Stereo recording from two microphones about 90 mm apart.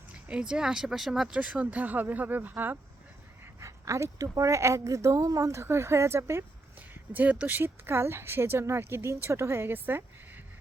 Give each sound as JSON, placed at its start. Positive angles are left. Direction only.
{"t": 0.3, "sound": "speech", "side_deg": -10}
{"t": 3.4, "sound": "speech", "side_deg": -35}
{"t": 6.7, "sound": "speech", "side_deg": -20}